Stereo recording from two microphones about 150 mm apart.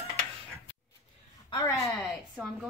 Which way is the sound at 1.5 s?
25° left (ahead or behind).